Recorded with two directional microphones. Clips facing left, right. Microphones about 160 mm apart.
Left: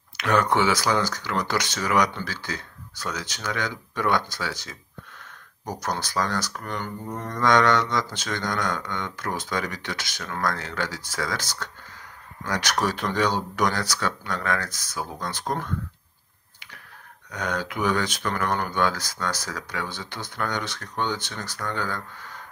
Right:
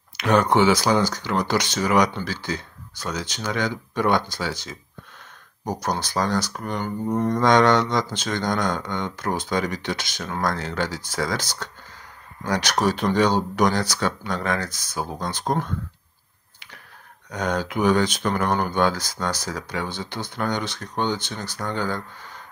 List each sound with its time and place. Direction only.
0.2 s speech: 25° right (ahead or behind)
17.3 s speech: 30° right (ahead or behind)